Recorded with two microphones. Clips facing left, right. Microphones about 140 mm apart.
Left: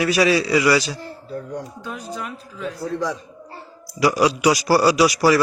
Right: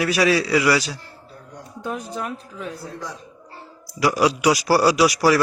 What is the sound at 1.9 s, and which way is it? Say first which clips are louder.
Speech: right 4 dB; 45° right (ahead or behind).